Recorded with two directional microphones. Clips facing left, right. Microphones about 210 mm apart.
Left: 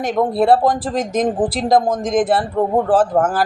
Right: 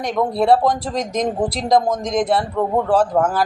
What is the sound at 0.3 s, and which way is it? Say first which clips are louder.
Speech: left 1 dB; 5° left (ahead or behind).